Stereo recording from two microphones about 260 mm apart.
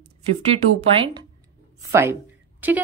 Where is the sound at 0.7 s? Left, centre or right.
Centre.